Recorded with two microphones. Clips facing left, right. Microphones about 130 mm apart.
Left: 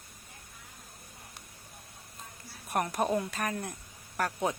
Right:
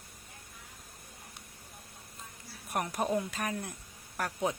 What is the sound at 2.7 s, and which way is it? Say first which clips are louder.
Speech: left 2 dB; 10° right (ahead or behind).